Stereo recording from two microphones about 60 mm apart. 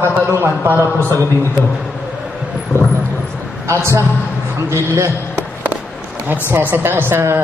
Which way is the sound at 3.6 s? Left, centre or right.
Right.